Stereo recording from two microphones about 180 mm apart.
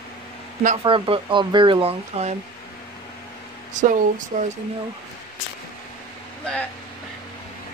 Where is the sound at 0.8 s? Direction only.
30° right (ahead or behind).